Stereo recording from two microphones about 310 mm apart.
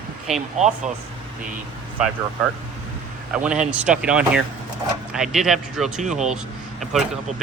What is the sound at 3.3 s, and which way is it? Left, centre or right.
Speech, centre.